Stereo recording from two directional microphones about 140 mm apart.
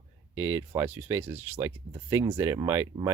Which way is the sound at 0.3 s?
15° right (ahead or behind).